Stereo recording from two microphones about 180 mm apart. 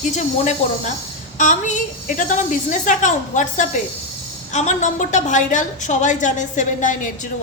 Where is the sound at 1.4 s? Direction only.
45° left (ahead or behind).